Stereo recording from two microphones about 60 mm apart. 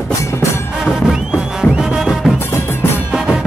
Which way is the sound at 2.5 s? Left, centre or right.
Left.